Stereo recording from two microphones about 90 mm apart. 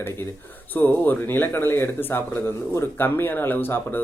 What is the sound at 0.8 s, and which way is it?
Speech, 20° left (ahead or behind).